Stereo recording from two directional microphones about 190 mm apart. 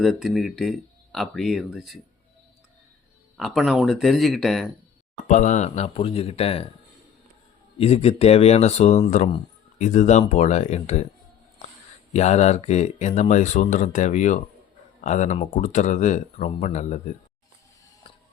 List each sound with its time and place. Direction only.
0.0 s speech: centre (ahead or behind)
3.3 s speech: centre (ahead or behind)
5.3 s speech: 40° left (ahead or behind)
7.8 s speech: 30° left (ahead or behind)
12.1 s speech: 35° left (ahead or behind)